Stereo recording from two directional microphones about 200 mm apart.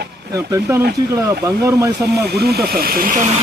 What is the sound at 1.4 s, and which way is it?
Speech, 15° right (ahead or behind).